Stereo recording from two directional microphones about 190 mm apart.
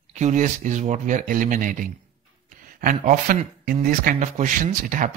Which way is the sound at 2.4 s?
45° right (ahead or behind).